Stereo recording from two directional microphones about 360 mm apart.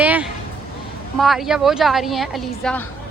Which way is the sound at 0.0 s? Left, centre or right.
Centre.